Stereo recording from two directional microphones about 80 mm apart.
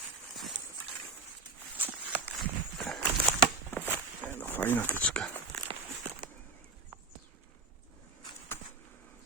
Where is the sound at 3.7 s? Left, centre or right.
Left.